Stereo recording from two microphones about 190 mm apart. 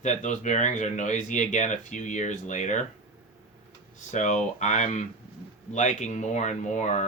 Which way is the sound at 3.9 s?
40° left (ahead or behind).